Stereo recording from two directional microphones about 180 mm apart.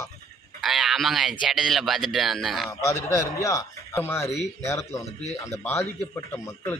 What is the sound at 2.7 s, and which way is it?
A man's voice, 15° left (ahead or behind).